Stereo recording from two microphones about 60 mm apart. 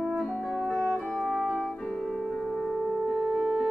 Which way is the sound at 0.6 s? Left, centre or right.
Centre.